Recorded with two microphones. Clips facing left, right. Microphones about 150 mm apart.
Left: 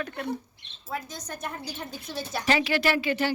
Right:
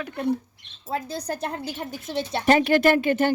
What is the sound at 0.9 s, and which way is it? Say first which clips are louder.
A woman's voice: right 7 dB; 35° right (ahead or behind).